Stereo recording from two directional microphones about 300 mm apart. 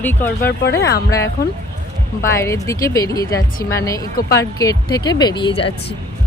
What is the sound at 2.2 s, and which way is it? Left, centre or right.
Speech, centre.